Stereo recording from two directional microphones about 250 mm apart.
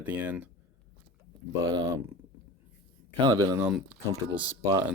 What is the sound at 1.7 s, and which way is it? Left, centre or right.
Speech, centre.